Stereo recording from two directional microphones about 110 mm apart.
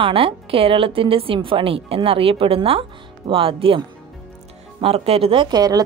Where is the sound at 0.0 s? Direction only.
60° right (ahead or behind).